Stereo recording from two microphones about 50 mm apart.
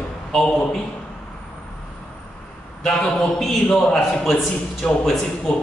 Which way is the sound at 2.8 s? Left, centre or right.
Centre.